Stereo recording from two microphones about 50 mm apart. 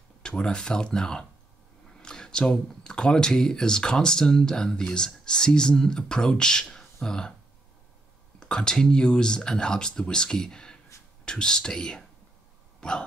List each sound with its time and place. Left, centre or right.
0.4 s speech: centre
8.4 s speech: centre